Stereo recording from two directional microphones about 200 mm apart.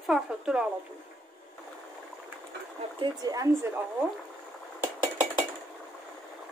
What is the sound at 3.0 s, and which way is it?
Speech, 20° right (ahead or behind).